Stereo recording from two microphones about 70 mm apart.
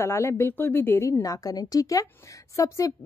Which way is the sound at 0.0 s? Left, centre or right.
Left.